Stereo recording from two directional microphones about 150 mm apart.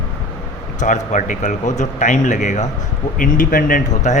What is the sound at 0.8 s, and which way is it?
Speech, 55° left (ahead or behind).